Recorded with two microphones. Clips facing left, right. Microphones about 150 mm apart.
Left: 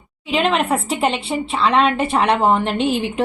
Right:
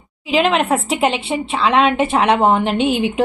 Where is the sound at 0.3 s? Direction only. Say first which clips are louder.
Right 2 dB; centre (ahead or behind).